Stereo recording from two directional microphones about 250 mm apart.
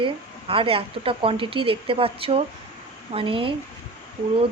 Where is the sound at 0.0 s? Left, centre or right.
Right.